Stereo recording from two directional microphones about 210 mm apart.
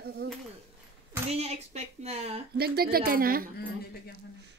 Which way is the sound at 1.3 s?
30° right (ahead or behind).